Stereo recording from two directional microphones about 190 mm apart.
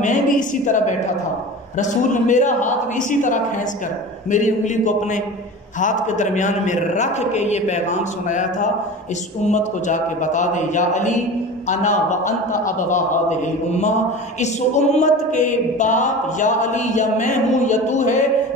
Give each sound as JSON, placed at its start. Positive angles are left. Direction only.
{"t": 0.0, "sound": "a woman's voice", "side_deg": 40}